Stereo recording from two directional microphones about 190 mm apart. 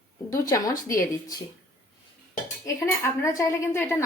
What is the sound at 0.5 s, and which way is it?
Speech, 15° left (ahead or behind).